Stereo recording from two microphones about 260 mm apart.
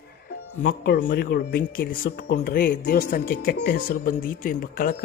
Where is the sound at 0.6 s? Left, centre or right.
Left.